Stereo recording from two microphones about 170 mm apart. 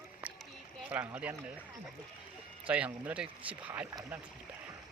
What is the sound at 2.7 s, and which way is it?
Speech, 10° right (ahead or behind).